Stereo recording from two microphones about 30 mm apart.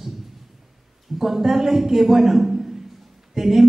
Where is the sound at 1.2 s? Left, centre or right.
Centre.